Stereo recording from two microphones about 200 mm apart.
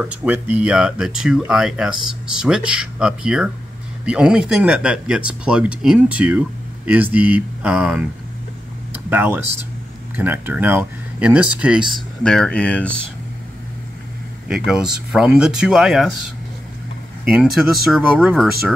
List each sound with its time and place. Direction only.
0.1 s speech: 5° right (ahead or behind)
6.9 s a sound: 10° right (ahead or behind)
10.1 s speech: 10° right (ahead or behind); by 12.9 s 5° left (ahead or behind)
14.5 s speech: 5° right (ahead or behind)
17.2 s speech: 5° right (ahead or behind)